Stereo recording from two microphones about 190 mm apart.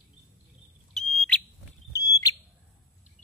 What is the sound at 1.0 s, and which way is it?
Smoke detector, centre (ahead or behind).